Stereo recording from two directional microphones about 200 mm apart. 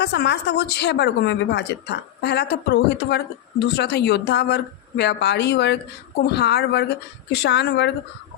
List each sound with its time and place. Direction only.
0.0 s speech: 55° left (ahead or behind)